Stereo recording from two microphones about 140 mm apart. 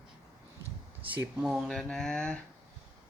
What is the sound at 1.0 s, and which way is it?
Speech, 10° right (ahead or behind).